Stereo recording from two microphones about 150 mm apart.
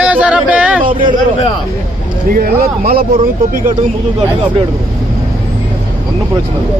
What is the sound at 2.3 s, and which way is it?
Speech, 80° right.